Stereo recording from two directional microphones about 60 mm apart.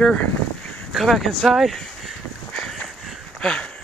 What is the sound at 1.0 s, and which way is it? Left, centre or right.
Speech, centre.